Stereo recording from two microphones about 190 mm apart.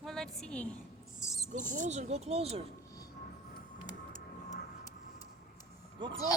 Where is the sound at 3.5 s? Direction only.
40° left (ahead or behind).